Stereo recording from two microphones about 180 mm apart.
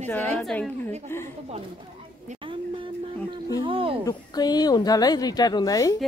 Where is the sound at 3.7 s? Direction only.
30° right (ahead or behind).